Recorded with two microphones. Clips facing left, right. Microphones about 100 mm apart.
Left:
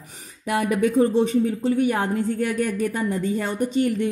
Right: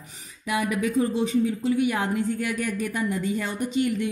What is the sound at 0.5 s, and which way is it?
A woman's voice, 50° left (ahead or behind).